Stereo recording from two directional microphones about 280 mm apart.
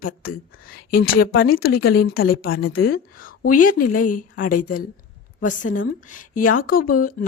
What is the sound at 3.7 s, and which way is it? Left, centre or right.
Speech, left.